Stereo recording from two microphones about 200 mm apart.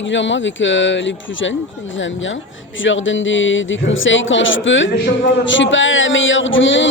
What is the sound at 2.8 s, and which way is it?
Speech, 70° left (ahead or behind).